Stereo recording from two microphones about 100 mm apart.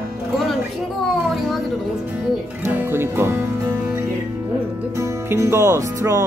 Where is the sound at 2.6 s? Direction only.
20° right (ahead or behind).